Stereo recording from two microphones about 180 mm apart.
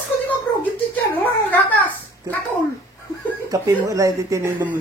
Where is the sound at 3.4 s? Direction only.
20° right (ahead or behind).